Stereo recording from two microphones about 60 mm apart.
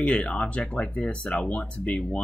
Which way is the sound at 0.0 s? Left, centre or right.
Centre.